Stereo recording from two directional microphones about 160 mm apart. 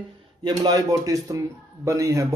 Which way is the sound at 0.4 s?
25° right (ahead or behind).